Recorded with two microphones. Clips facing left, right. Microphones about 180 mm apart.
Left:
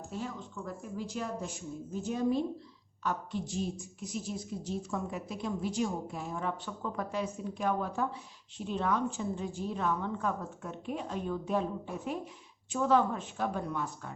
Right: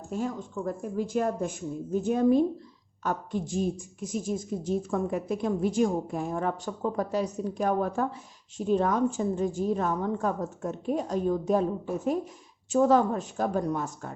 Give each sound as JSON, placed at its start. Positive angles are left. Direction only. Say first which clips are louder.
{"t": 0.1, "sound": "a woman's voice", "louder": "right 9 dB", "side_deg": -45}